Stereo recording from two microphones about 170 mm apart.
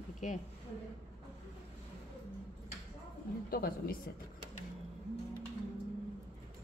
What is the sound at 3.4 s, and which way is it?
Speech, 60° left (ahead or behind).